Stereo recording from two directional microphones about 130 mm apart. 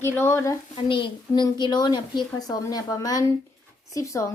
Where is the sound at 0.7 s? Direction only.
40° left (ahead or behind); by 4.3 s 25° left (ahead or behind).